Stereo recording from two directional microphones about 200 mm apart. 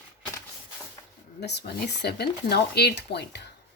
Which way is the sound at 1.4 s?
55° left (ahead or behind).